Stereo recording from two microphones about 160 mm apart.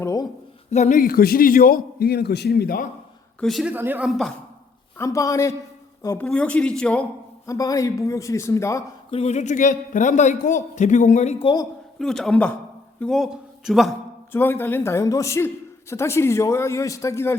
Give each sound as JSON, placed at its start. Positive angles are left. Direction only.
{"t": 0.0, "sound": "speech", "side_deg": 20}
{"t": 0.7, "sound": "a man's voice", "side_deg": 50}
{"t": 3.4, "sound": "a man's voice", "side_deg": 0}
{"t": 3.8, "sound": "speech", "side_deg": -10}
{"t": 4.9, "sound": "a man's voice", "side_deg": 20}
{"t": 6.2, "sound": "a man's voice", "side_deg": 5}
{"t": 7.4, "sound": "a man's voice", "side_deg": 20}
{"t": 9.0, "sound": "a man's voice", "side_deg": 40}
{"t": 11.9, "sound": "a man's voice", "side_deg": 0}
{"t": 14.3, "sound": "a man's voice", "side_deg": 15}